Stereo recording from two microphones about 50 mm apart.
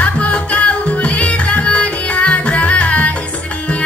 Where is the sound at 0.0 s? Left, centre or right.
Left.